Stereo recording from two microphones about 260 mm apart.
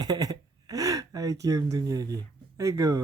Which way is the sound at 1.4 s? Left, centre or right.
Centre.